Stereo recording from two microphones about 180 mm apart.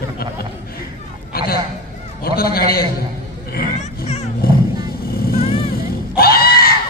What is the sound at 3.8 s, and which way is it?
Music, 35° left (ahead or behind).